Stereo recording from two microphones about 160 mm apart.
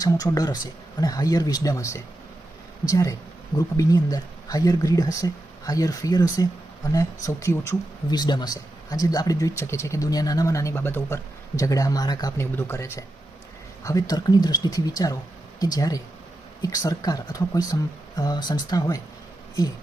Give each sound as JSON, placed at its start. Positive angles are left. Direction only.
{"t": 0.0, "sound": "speech", "side_deg": 20}